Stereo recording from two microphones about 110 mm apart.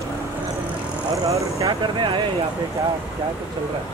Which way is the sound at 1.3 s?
30° right (ahead or behind).